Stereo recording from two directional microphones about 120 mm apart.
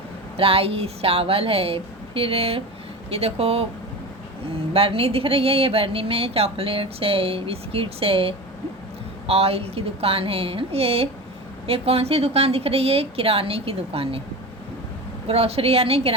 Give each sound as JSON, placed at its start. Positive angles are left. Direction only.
{"t": 0.3, "sound": "a woman's voice", "side_deg": -50}
{"t": 4.7, "sound": "a woman's voice", "side_deg": -50}
{"t": 15.3, "sound": "a woman's voice", "side_deg": -55}